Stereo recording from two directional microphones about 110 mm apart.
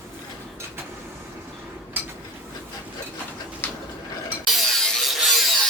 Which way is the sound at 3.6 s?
15° left (ahead or behind).